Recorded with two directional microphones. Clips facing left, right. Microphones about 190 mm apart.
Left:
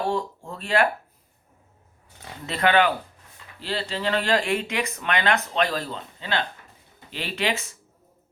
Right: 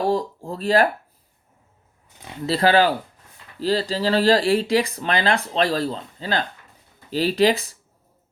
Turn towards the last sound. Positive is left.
turn(degrees=-35)  # may be behind; listen again after turning